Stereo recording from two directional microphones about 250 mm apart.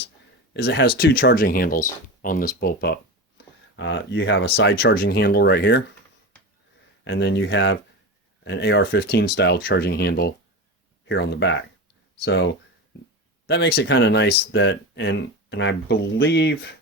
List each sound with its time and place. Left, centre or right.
0.5 s speech: left
7.0 s speech: left
13.5 s speech: left